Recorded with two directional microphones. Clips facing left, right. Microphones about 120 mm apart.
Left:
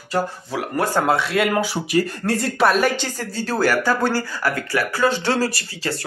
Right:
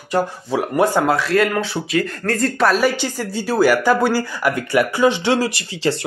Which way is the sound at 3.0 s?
10° right (ahead or behind).